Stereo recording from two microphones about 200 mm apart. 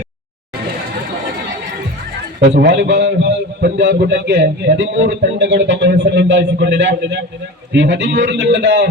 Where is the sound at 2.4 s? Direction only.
60° right (ahead or behind).